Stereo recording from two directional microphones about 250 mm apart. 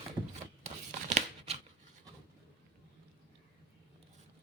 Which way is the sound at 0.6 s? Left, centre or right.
Right.